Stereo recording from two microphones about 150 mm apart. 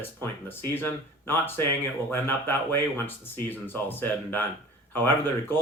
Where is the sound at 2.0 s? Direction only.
15° left (ahead or behind).